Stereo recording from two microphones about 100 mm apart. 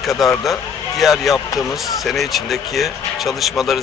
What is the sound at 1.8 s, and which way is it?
Speech, centre (ahead or behind).